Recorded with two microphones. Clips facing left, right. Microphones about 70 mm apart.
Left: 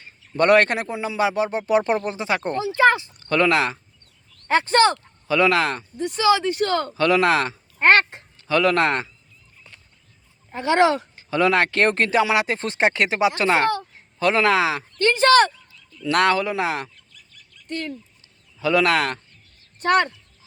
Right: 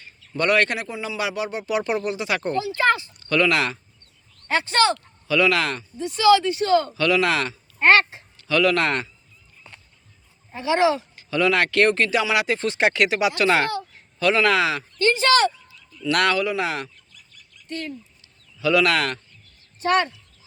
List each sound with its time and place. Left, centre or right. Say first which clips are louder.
0.0 s a man's voice: left 4 dB; left
10.5 s speech: left 2 dB; left
11.1 s a man's voice: left 2 dB; left
14.5 s speech: left 1 dB; left
15.0 s speech: left 3 dB; left
16.0 s a man's voice: left 2 dB; left
17.2 s bird: even; centre
18.6 s a man's voice: left 1 dB; left